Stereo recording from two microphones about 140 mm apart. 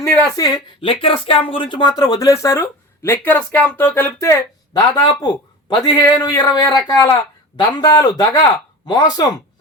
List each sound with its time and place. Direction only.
0.0 s speech: 25° left (ahead or behind)
0.8 s speech: 40° left (ahead or behind)